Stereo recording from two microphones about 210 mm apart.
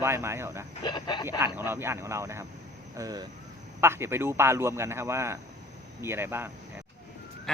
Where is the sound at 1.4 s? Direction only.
10° right (ahead or behind).